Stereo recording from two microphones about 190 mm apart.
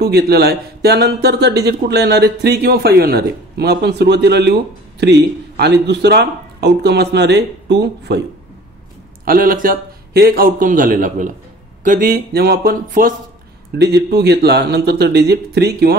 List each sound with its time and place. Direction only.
0.0 s speech: 55° right (ahead or behind)
9.2 s a man's voice: 50° right (ahead or behind)